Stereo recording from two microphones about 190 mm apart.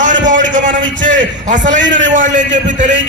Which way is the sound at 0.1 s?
75° right (ahead or behind).